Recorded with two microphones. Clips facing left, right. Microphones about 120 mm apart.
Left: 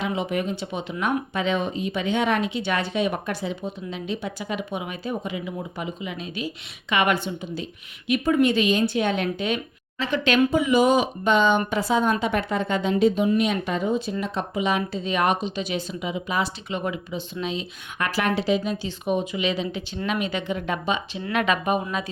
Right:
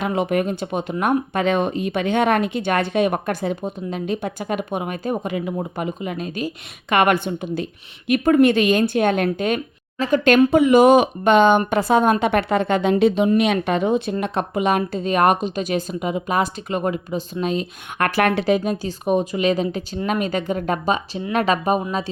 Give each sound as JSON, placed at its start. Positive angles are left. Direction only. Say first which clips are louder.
{"t": 0.0, "sound": "speech", "louder": "right 5 dB", "side_deg": -55}